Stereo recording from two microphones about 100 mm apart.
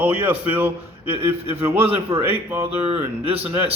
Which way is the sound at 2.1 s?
75° right (ahead or behind).